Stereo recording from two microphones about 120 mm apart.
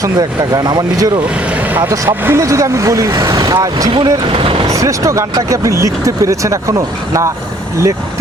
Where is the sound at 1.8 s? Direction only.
25° right (ahead or behind).